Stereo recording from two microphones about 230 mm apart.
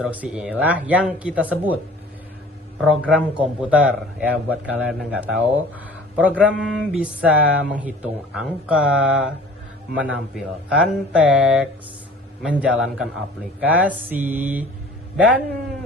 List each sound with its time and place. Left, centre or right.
0.0 s speech: centre
2.8 s speech: centre